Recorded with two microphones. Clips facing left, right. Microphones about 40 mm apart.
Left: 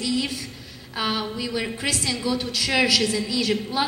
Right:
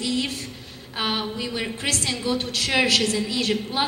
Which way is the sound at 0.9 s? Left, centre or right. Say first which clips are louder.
Even; right.